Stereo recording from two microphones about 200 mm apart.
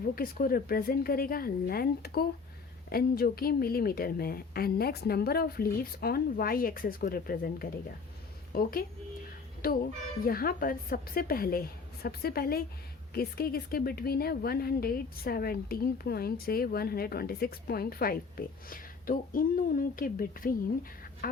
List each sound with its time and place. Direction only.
0.0 s a woman's voice: 45° left (ahead or behind)